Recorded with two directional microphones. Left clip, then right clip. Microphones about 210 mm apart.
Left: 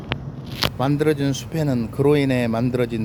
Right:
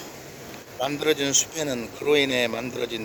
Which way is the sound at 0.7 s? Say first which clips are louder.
Left 1 dB; 15° left (ahead or behind).